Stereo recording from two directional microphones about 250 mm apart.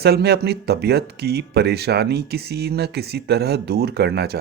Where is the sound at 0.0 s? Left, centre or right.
Right.